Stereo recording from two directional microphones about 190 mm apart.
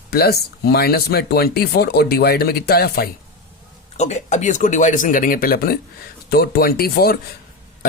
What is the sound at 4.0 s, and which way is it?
Speech, 35° left (ahead or behind).